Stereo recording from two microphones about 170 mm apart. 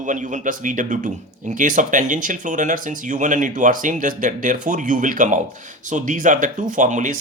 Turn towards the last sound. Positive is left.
turn(degrees=-50)  # may be behind; listen again after turning